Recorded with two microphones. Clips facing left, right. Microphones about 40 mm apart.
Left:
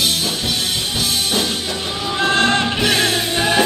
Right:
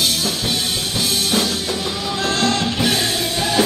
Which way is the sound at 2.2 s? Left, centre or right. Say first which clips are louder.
Left 4 dB; left.